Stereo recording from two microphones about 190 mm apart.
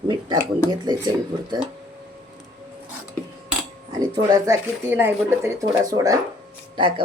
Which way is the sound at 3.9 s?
20° right (ahead or behind).